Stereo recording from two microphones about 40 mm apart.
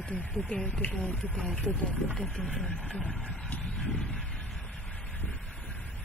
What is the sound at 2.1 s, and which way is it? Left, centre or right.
Speech, left.